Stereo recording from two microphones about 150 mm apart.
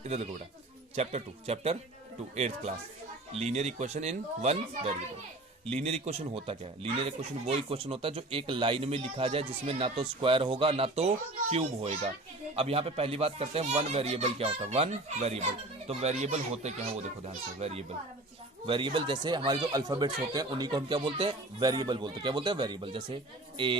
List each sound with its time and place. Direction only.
0.0 s a child's voice: 45° right (ahead or behind)